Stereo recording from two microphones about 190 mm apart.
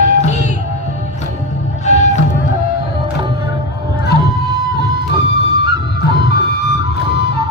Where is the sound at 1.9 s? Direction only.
35° left (ahead or behind).